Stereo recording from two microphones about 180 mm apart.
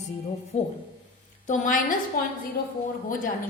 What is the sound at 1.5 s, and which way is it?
Speech, 50° left (ahead or behind).